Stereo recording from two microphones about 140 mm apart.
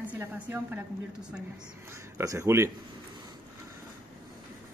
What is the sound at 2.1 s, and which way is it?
Speech, 20° right (ahead or behind).